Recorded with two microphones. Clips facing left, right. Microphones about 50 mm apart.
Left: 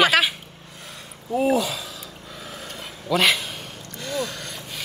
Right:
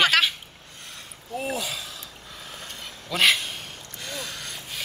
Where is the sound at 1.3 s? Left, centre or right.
Centre.